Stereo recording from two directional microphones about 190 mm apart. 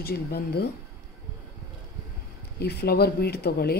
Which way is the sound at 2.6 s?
60° left (ahead or behind).